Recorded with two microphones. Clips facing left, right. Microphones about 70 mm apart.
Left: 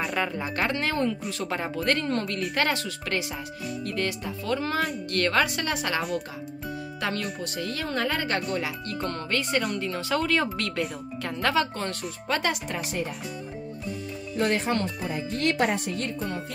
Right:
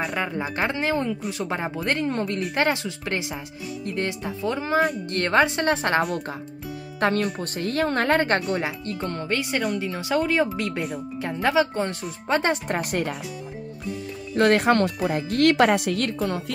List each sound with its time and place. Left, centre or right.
0.2 s speech: centre; by 5.9 s right
7.0 s speech: right
8.5 s speech: right
9.6 s speech: centre
9.8 s speech: centre
12.6 s speech: right
14.3 s speech: right